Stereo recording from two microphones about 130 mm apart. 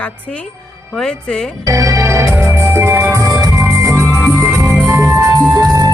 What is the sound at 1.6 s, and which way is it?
Music, 25° right (ahead or behind).